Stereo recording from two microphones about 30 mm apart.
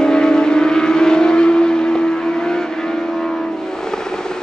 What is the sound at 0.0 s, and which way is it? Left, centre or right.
Vehicle, left.